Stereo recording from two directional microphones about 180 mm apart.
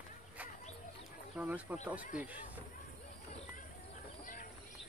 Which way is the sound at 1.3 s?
10° right (ahead or behind).